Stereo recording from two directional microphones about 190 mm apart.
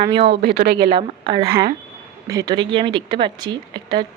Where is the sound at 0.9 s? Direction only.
30° right (ahead or behind).